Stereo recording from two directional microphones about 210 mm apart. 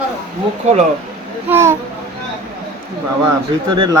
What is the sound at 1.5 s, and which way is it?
Speech, 10° right (ahead or behind).